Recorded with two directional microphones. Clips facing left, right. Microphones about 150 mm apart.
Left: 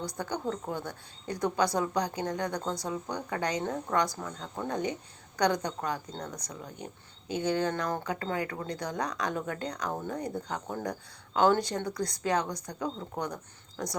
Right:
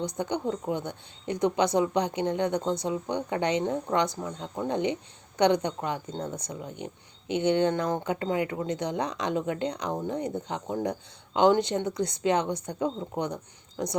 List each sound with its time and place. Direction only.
0.0 s speech: 20° right (ahead or behind)